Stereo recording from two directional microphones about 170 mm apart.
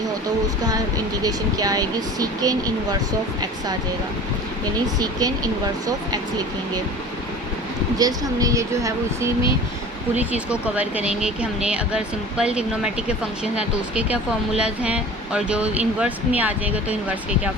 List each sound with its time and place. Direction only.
0.6 s speech: 20° right (ahead or behind)
4.9 s speech: 20° right (ahead or behind)
7.9 s speech: 20° right (ahead or behind)
10.2 s speech: 10° right (ahead or behind)